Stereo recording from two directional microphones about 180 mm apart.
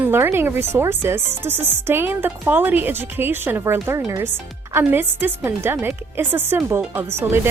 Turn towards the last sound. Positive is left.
turn(degrees=-15)  # may be behind; listen again after turning